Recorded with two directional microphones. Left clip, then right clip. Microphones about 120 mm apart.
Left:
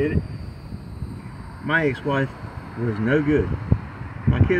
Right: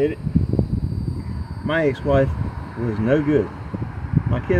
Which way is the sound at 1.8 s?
25° right (ahead or behind).